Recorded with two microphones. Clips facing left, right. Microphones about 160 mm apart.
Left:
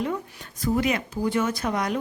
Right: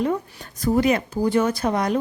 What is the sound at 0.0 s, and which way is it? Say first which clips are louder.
Speech: right 5 dB; 40° right (ahead or behind).